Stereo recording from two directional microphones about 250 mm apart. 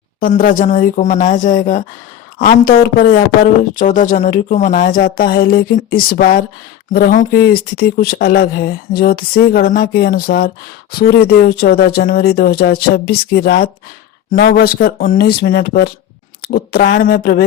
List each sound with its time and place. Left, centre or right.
0.2 s speech: left